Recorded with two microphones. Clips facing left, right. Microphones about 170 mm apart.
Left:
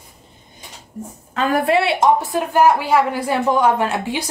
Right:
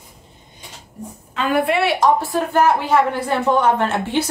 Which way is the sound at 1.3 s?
40° left (ahead or behind).